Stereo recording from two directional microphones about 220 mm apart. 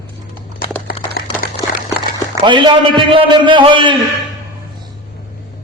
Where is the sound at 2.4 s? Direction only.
20° right (ahead or behind).